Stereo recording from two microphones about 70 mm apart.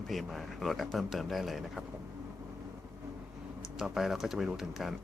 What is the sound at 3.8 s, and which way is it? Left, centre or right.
Speech, centre.